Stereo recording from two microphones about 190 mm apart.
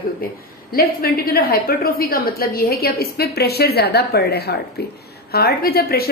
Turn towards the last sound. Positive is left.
turn(degrees=55)  # may be behind; listen again after turning